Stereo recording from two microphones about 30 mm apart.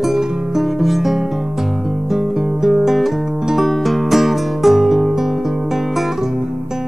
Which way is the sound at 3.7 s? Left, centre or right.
Centre.